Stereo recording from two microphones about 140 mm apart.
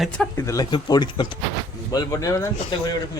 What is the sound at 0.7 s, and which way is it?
Speech, 30° left (ahead or behind).